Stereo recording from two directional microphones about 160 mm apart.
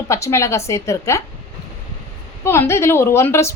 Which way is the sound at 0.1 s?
20° left (ahead or behind).